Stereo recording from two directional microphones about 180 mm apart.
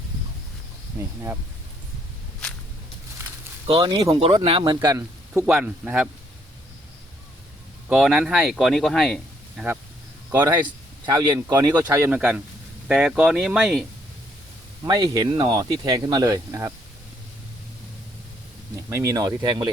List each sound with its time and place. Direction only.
0.9 s speech: 15° right (ahead or behind)
3.7 s speech: 30° right (ahead or behind)
5.3 s speech: 10° right (ahead or behind)
7.9 s speech: centre (ahead or behind)
10.3 s speech: 10° right (ahead or behind)
10.6 s speech: 25° right (ahead or behind)
12.9 s speech: 5° right (ahead or behind)
14.8 s speech: 20° right (ahead or behind)
18.9 s speech: 15° right (ahead or behind)